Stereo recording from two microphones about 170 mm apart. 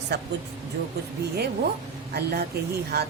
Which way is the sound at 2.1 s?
65° right (ahead or behind).